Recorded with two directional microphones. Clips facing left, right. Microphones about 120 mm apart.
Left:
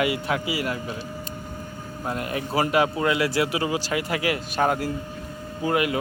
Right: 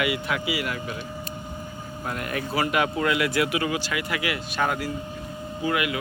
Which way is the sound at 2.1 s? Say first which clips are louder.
Left 2 dB; 25° left (ahead or behind).